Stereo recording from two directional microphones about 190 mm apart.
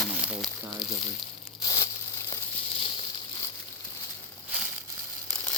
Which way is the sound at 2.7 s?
25° left (ahead or behind).